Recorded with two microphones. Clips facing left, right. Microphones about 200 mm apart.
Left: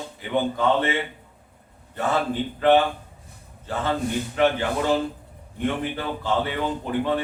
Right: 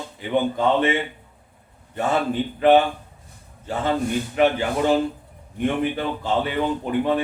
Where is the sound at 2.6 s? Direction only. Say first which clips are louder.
Right 2 dB; 20° right (ahead or behind).